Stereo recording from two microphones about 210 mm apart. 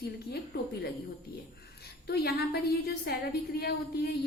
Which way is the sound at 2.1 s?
50° left (ahead or behind).